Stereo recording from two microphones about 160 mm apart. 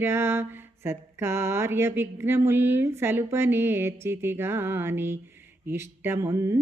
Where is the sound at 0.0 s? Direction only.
15° right (ahead or behind).